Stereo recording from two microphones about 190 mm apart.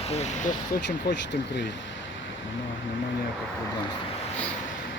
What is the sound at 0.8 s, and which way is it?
Speech, 65° left (ahead or behind).